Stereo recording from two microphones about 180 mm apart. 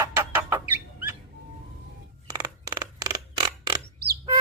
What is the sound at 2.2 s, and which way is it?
Creak, 20° right (ahead or behind).